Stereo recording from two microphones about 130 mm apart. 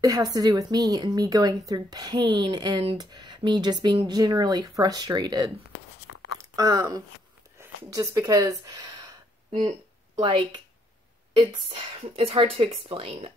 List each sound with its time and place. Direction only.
0.0 s a woman's voice: 25° right (ahead or behind)
6.5 s speech: 30° right (ahead or behind)
9.6 s a woman's voice: 35° right (ahead or behind)